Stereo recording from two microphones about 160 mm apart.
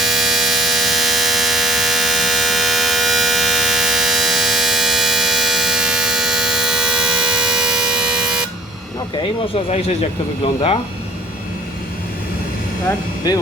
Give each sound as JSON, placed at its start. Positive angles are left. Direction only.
{"t": 0.0, "sound": "hum", "side_deg": 0}
{"t": 9.6, "sound": "speech", "side_deg": 40}
{"t": 13.2, "sound": "speech", "side_deg": 25}